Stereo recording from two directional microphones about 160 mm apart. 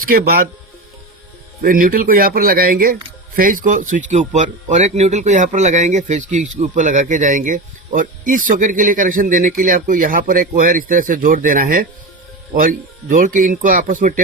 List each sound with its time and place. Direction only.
0.1 s speech: 70° right (ahead or behind)
1.6 s speech: 60° right (ahead or behind)